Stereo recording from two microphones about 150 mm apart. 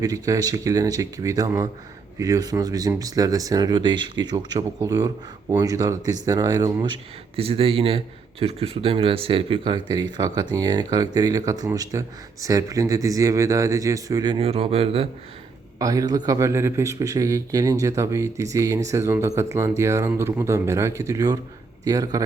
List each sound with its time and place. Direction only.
0.0 s a man's voice: 25° right (ahead or behind)
14.3 s speech: 40° right (ahead or behind)
15.8 s a man's voice: 25° right (ahead or behind)